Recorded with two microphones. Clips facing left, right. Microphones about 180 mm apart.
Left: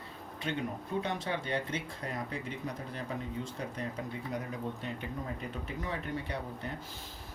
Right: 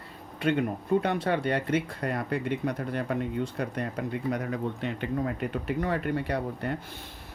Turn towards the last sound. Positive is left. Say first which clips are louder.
# right 8 dB
turn(degrees=-65)  # may be behind; listen again after turning